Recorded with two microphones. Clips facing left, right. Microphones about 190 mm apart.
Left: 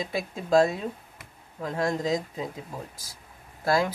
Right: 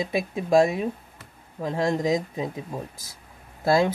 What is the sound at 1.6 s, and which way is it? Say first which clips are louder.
Speech: right 3 dB; 25° right (ahead or behind).